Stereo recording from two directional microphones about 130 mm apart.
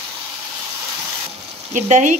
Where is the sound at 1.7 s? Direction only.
70° right (ahead or behind).